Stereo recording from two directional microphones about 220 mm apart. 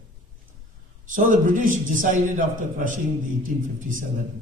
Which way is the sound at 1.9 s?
35° right (ahead or behind).